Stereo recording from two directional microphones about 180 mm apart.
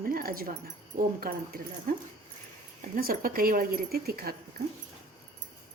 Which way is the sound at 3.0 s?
55° right (ahead or behind).